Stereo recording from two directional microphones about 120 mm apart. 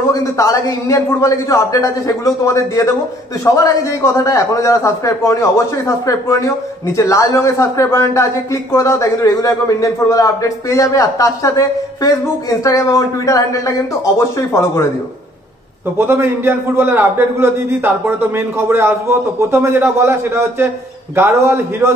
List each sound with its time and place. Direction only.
0.1 s a man's voice: 25° left (ahead or behind)
16.1 s a man's voice: 20° right (ahead or behind)